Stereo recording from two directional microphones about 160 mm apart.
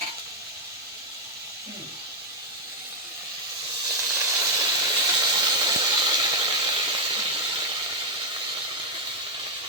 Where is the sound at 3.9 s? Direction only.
20° right (ahead or behind).